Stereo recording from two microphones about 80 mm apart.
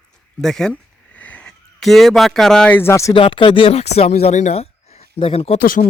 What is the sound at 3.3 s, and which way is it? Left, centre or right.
Speech, left.